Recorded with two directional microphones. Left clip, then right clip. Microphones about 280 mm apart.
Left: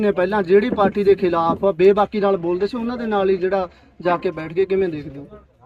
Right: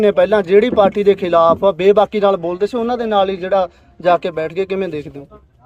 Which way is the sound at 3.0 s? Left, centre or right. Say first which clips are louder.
Even; centre.